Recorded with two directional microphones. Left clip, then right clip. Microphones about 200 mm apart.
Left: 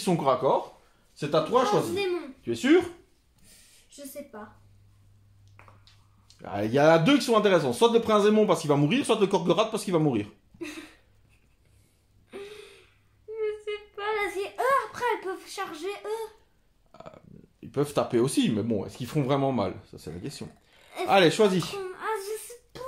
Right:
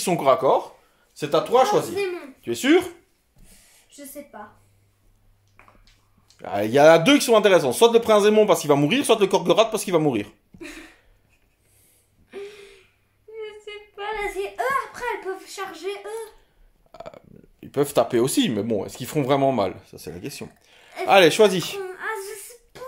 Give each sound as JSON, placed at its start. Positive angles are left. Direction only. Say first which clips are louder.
{"t": 0.0, "sound": "speech", "louder": "right 6 dB", "side_deg": -40}
{"t": 6.3, "sound": "speech", "louder": "right 6 dB", "side_deg": -40}
{"t": 13.4, "sound": "a sound", "louder": "left 5 dB", "side_deg": 20}
{"t": 16.9, "sound": "speech", "louder": "right 7 dB", "side_deg": -40}